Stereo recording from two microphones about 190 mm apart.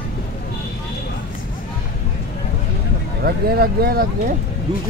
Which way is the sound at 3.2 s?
55° right (ahead or behind).